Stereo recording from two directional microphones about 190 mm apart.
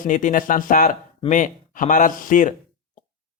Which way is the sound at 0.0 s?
40° left (ahead or behind).